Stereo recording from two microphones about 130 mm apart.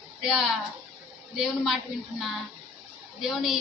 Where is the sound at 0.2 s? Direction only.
5° right (ahead or behind).